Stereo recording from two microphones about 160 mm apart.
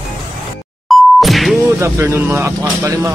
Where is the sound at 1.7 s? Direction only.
15° right (ahead or behind).